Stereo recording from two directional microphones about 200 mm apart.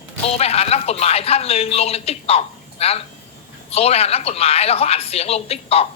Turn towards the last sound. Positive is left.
turn(degrees=30)  # may be behind; listen again after turning